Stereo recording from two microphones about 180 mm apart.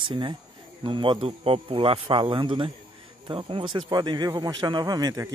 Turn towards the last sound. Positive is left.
turn(degrees=-20)  # may be behind; listen again after turning